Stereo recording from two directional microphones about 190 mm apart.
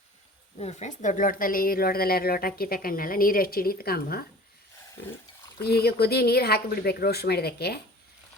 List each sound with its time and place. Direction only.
0.6 s a woman's voice: 35° left (ahead or behind); by 4.3 s 55° left (ahead or behind)
5.5 s speech: 55° left (ahead or behind)